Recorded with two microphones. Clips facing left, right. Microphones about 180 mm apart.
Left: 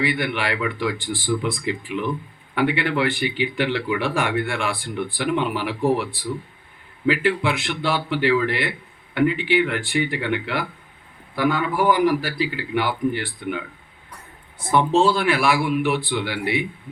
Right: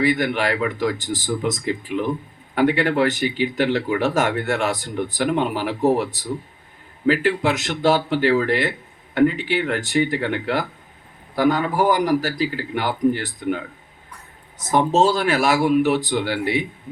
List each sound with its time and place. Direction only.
0.0 s speech: 40° right (ahead or behind)